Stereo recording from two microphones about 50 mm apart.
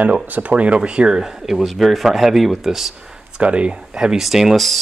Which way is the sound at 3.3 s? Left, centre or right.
Right.